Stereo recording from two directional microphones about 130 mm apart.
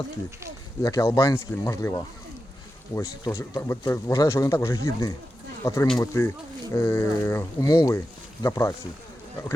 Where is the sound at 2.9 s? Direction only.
25° left (ahead or behind).